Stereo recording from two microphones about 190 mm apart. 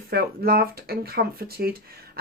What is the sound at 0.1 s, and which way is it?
A woman's voice, 50° right (ahead or behind).